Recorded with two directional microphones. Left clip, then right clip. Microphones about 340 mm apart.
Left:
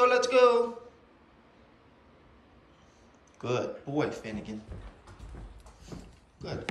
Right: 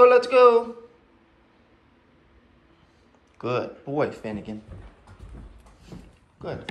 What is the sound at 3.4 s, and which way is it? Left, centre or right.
Speech, centre.